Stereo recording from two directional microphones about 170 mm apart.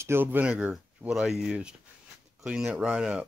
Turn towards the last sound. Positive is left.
turn(degrees=-5)  # may be behind; listen again after turning